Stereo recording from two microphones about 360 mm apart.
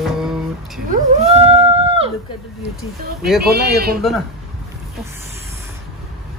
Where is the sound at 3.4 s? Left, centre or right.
Right.